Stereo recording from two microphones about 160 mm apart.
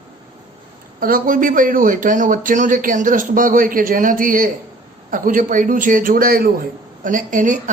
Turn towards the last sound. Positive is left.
turn(degrees=-55)  # may be behind; listen again after turning